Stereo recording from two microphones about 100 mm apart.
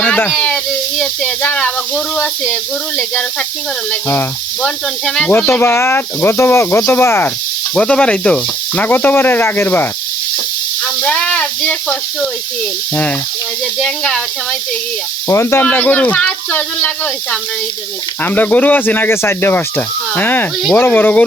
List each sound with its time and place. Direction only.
0.0 s speech: 20° left (ahead or behind)
4.1 s speech: 25° left (ahead or behind)
5.0 s speech: 10° left (ahead or behind)
7.8 s speech: 10° left (ahead or behind)
11.0 s speech: 15° left (ahead or behind)
13.8 s speech: 10° left (ahead or behind)
15.3 s speech: 25° left (ahead or behind)
18.2 s speech: 15° left (ahead or behind)